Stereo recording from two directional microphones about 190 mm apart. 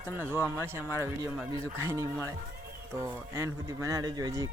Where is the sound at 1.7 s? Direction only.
15° right (ahead or behind).